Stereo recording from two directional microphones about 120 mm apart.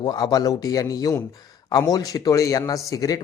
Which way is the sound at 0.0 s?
35° left (ahead or behind).